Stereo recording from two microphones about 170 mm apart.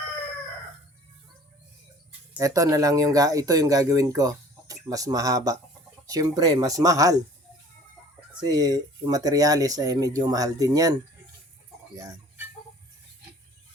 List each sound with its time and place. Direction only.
2.4 s speech: 20° right (ahead or behind)
8.4 s speech: 25° right (ahead or behind)
11.9 s a sound: 15° right (ahead or behind)